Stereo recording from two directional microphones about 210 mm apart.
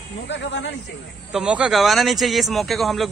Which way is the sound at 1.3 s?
5° right (ahead or behind).